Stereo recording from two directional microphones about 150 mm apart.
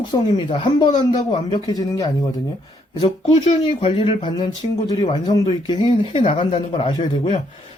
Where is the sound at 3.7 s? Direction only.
40° left (ahead or behind).